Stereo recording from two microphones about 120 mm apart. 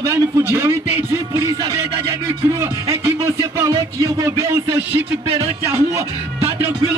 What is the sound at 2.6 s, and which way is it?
Speech, 25° right (ahead or behind).